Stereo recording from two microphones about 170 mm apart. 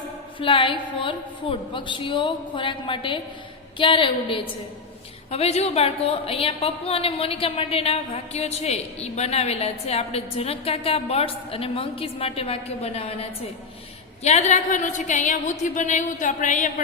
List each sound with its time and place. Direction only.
0.3 s a woman's voice: 30° left (ahead or behind); by 16.8 s 45° left (ahead or behind)